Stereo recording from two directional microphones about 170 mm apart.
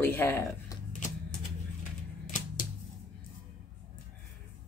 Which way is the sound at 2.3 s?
50° left (ahead or behind).